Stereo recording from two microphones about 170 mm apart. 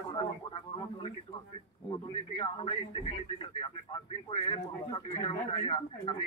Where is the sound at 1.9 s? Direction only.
30° left (ahead or behind).